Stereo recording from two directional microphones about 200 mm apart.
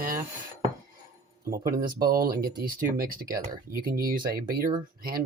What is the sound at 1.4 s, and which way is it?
Speech, 45° right (ahead or behind).